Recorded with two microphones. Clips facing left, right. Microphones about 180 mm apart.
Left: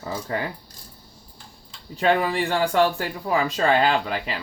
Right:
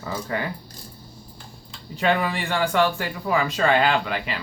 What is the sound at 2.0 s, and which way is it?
Speech, 35° left (ahead or behind).